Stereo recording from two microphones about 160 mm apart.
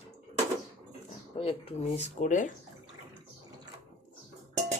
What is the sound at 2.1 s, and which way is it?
Speech, 50° left (ahead or behind).